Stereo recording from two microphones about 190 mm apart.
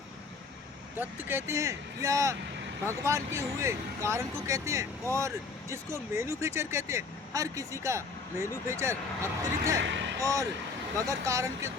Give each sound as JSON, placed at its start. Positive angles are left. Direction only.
{"t": 0.9, "sound": "speech", "side_deg": -10}
{"t": 9.8, "sound": "speech", "side_deg": -70}
{"t": 10.2, "sound": "speech", "side_deg": -15}